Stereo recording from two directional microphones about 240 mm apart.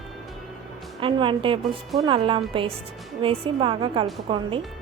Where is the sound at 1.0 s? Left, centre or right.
Right.